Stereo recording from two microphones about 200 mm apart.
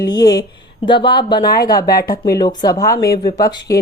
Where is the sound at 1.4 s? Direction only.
50° left (ahead or behind).